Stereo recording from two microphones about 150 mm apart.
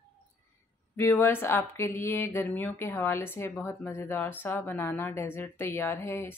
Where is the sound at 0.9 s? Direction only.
15° left (ahead or behind).